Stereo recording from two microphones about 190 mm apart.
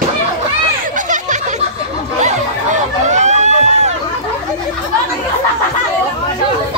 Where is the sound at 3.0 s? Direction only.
40° right (ahead or behind).